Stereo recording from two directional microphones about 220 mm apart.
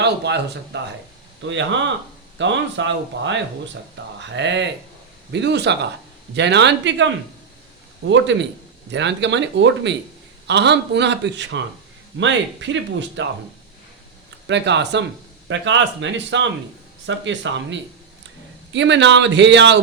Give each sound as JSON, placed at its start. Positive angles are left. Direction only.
{"t": 0.0, "sound": "a man's voice", "side_deg": -50}
{"t": 8.1, "sound": "a man's voice", "side_deg": -55}
{"t": 14.4, "sound": "a man's voice", "side_deg": -55}